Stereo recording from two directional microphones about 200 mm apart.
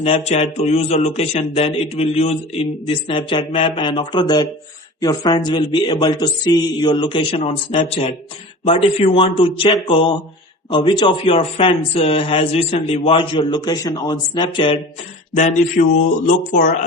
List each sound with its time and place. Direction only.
0.0 s a man's voice: 30° left (ahead or behind)
15.4 s speech: 35° left (ahead or behind)